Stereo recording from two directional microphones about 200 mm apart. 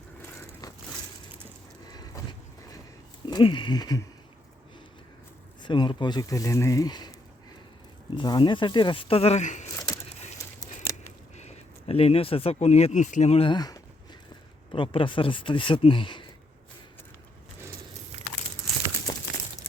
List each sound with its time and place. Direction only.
0.2 s vehicle: 15° left (ahead or behind)
1.9 s a sound: 20° left (ahead or behind)
3.2 s speech: 20° left (ahead or behind)
5.6 s speech: 25° left (ahead or behind)
8.1 s speech: 25° left (ahead or behind)
10.9 s scissors: 15° left (ahead or behind)
11.3 s speech: 30° left (ahead or behind)